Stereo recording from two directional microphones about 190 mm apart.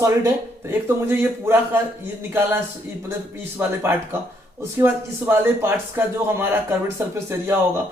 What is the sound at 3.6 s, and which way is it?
A man's voice, 10° right (ahead or behind).